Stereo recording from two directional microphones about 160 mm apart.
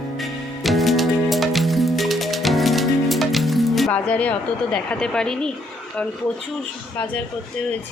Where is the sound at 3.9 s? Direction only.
10° left (ahead or behind).